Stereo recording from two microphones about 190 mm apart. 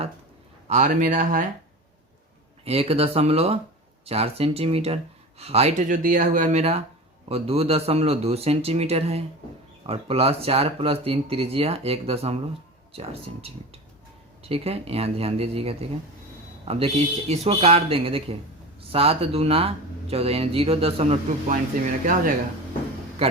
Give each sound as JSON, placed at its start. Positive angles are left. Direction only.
{"t": 0.7, "sound": "speech", "side_deg": -40}
{"t": 2.6, "sound": "speech", "side_deg": -30}
{"t": 14.4, "sound": "speech", "side_deg": -30}